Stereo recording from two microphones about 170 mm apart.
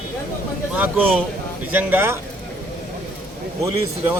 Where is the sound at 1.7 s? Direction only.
10° right (ahead or behind).